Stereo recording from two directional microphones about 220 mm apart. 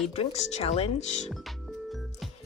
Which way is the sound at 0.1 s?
30° left (ahead or behind).